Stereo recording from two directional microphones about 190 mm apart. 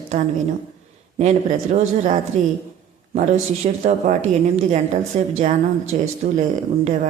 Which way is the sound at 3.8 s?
35° right (ahead or behind).